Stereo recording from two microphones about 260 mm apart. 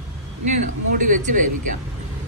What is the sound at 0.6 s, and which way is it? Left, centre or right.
Speech, right.